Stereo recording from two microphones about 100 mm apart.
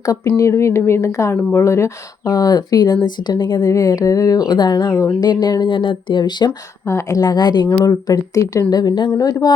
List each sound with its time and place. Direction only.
0.3 s speech: 30° left (ahead or behind); by 3.7 s 45° left (ahead or behind)
3.7 s speech: 35° left (ahead or behind)
6.8 s speech: 30° left (ahead or behind)
7.7 s speech: 25° left (ahead or behind)
8.0 s speech: 35° left (ahead or behind)